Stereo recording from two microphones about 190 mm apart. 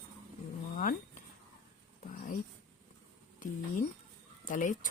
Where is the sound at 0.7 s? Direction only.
45° left (ahead or behind).